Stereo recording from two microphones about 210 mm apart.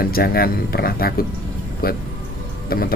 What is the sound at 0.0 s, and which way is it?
Speech, 45° left (ahead or behind).